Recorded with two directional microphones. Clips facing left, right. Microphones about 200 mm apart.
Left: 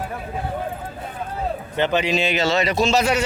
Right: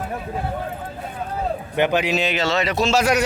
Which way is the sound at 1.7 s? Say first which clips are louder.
Right 1 dB; 10° right (ahead or behind).